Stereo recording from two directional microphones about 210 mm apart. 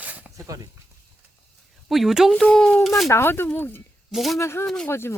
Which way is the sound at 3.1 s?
10° left (ahead or behind).